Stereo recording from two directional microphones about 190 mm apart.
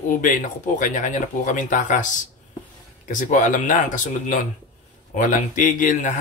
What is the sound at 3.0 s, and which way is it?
Speech, 45° left (ahead or behind).